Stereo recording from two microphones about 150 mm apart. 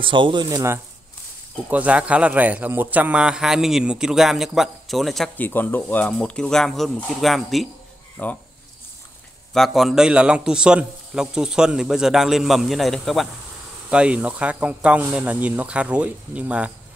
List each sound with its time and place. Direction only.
0.0 s speech: 35° right (ahead or behind)
1.7 s a man's voice: 10° right (ahead or behind)
5.4 s speech: 15° left (ahead or behind)
8.2 s speech: 10° left (ahead or behind)
9.5 s a man's voice: centre (ahead or behind)